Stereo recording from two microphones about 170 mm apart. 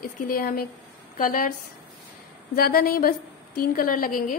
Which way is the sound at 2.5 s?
60° left (ahead or behind).